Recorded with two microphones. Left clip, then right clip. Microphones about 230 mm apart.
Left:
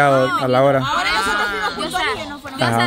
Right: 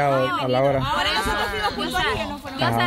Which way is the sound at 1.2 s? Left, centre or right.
Left.